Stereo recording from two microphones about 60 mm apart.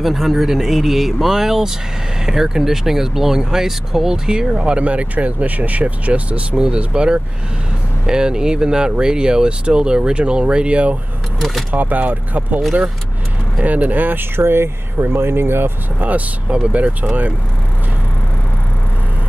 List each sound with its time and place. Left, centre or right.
0.0 s speech: centre; by 16.1 s right
16.1 s speech: right